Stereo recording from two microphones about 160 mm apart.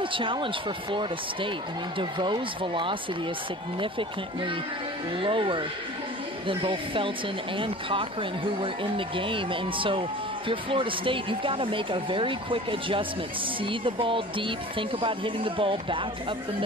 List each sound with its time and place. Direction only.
0.0 s speech: 30° right (ahead or behind)
2.0 s speech: 30° right (ahead or behind)
5.2 s speech: 30° right (ahead or behind)